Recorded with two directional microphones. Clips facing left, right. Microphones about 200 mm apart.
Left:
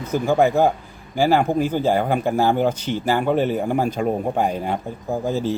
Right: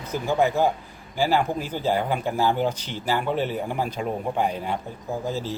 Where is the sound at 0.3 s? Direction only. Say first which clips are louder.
Left 4 dB; 50° left (ahead or behind).